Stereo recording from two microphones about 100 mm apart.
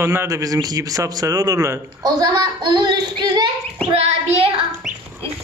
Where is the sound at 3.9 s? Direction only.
80° right.